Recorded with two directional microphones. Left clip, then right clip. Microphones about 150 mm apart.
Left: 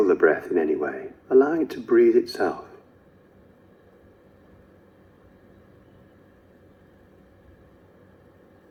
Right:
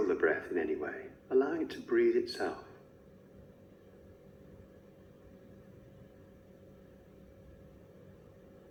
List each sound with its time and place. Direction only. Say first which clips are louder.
0.1 s a man's voice: left 11 dB; 25° left (ahead or behind)